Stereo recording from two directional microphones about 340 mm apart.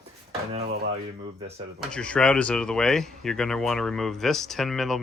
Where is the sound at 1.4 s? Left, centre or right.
Centre.